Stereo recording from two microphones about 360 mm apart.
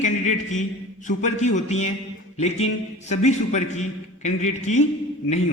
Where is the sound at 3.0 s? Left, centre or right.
Centre.